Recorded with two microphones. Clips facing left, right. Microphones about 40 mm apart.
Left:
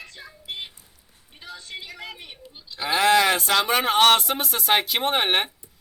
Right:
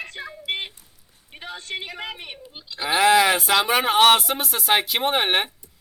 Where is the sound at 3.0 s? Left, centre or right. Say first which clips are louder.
Right 2 dB; centre.